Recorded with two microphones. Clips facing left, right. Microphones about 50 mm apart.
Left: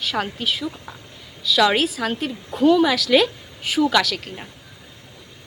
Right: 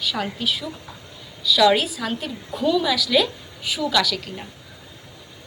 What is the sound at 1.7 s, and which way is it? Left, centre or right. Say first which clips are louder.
A woman's voice: left 3 dB; left.